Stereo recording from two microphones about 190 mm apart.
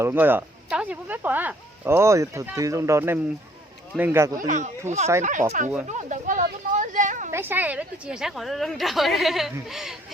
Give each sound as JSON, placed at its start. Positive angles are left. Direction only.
{"t": 0.0, "sound": "speech", "side_deg": -10}
{"t": 4.4, "sound": "speech", "side_deg": -40}
{"t": 5.9, "sound": "a sound", "side_deg": -40}
{"t": 7.3, "sound": "a woman's voice", "side_deg": -10}